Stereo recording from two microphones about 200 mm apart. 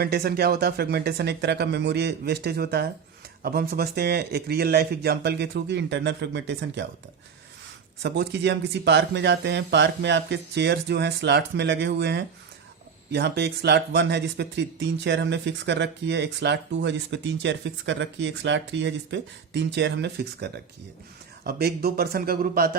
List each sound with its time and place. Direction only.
0.0 s speech: 50° right (ahead or behind)
8.0 s speech: 55° right (ahead or behind)